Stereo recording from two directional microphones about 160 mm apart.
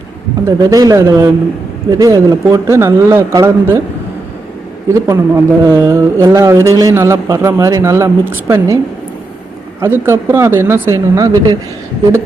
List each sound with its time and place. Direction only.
0.4 s speech: 20° right (ahead or behind)
5.0 s speech: 15° right (ahead or behind)
9.8 s speech: 15° right (ahead or behind)